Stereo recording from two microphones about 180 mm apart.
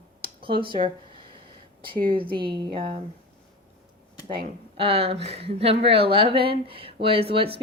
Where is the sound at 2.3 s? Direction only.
25° right (ahead or behind).